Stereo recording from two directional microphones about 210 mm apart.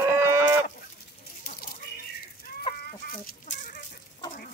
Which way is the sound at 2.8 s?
45° left (ahead or behind).